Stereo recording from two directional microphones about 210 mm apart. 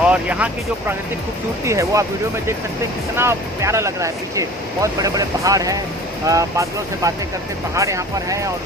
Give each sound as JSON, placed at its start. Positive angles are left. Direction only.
{"t": 0.0, "sound": "speech", "side_deg": -5}
{"t": 3.2, "sound": "speech", "side_deg": -15}